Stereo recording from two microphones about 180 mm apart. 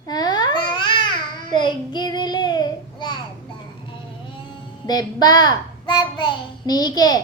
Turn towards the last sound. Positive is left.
turn(degrees=20)  # may be behind; listen again after turning